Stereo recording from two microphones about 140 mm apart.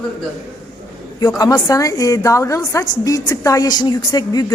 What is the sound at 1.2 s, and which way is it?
A woman's voice, 25° left (ahead or behind).